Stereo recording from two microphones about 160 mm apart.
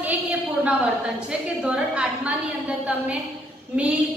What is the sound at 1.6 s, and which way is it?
Speech, 10° right (ahead or behind).